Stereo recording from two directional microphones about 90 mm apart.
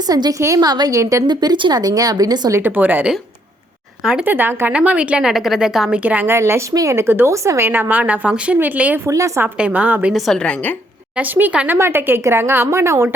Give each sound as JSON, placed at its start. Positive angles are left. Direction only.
{"t": 0.1, "sound": "a woman's voice", "side_deg": -45}
{"t": 1.8, "sound": "a woman's voice", "side_deg": -45}
{"t": 2.5, "sound": "speech", "side_deg": -25}
{"t": 4.0, "sound": "a woman's voice", "side_deg": -5}
{"t": 4.3, "sound": "a woman's voice", "side_deg": -20}
{"t": 6.0, "sound": "a woman's voice", "side_deg": -15}
{"t": 6.3, "sound": "speech", "side_deg": -30}
{"t": 9.0, "sound": "a woman's voice", "side_deg": -35}
{"t": 9.6, "sound": "a woman's voice", "side_deg": -15}
{"t": 10.1, "sound": "a woman's voice", "side_deg": 0}
{"t": 10.4, "sound": "a woman's voice", "side_deg": 15}
{"t": 11.2, "sound": "speech", "side_deg": -20}